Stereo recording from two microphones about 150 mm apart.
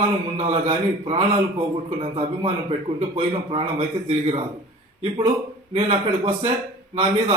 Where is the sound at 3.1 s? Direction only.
40° right (ahead or behind).